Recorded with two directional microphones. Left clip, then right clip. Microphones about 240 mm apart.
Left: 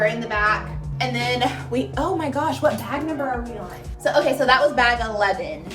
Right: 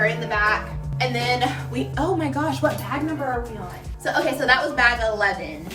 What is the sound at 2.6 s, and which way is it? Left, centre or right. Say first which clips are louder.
Speech: left 2 dB; centre.